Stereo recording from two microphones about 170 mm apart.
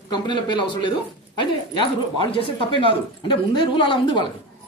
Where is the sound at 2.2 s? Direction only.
30° left (ahead or behind).